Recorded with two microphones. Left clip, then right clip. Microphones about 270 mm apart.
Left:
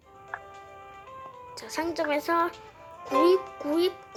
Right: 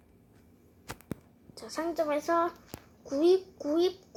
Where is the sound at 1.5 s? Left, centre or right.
Centre.